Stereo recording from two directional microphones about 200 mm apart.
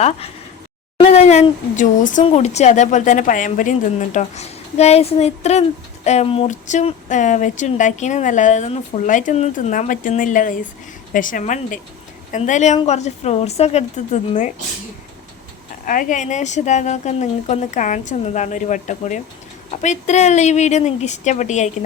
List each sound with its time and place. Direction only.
0.9 s speech: 30° left (ahead or behind)
15.9 s speech: 40° left (ahead or behind)